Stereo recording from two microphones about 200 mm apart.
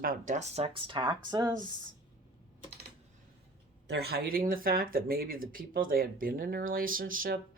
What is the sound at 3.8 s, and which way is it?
Speech, 55° right (ahead or behind).